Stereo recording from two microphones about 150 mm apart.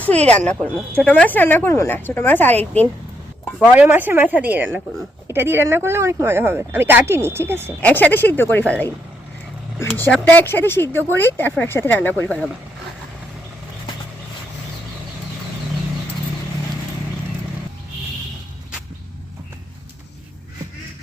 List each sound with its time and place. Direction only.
0.0 s speech: 10° left (ahead or behind)
3.6 s speech: 10° right (ahead or behind)
7.8 s speech: 10° left (ahead or behind)
10.1 s speech: 10° left (ahead or behind)